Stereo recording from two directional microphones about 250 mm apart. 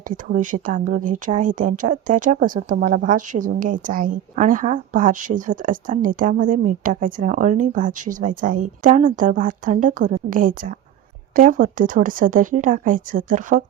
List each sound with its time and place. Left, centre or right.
0.1 s speech: right